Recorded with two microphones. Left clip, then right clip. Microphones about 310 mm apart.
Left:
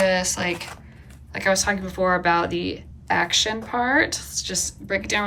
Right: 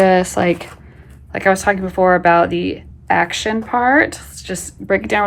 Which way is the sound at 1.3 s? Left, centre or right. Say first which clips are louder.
Right 7 dB; centre.